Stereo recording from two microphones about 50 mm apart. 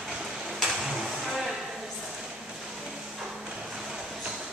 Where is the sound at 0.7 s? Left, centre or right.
Centre.